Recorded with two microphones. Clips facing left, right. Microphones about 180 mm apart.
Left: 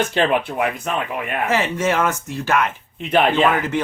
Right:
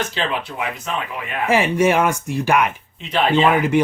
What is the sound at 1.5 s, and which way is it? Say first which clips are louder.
Speech: right 5 dB; 10° right (ahead or behind).